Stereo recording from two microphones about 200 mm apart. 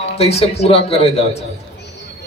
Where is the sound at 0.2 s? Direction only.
30° left (ahead or behind).